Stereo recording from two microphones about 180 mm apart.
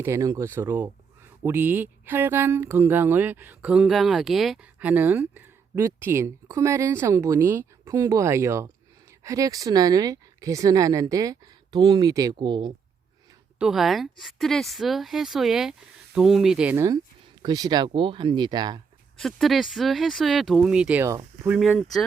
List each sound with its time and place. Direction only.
0.0 s speech: 15° right (ahead or behind)
13.6 s speech: centre (ahead or behind); by 18.8 s 25° right (ahead or behind)
19.2 s speech: centre (ahead or behind); by 21.5 s 15° right (ahead or behind)
21.5 s speech: 5° right (ahead or behind)